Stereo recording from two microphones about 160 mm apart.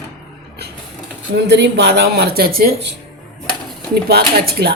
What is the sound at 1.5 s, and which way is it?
Speech, 90° right.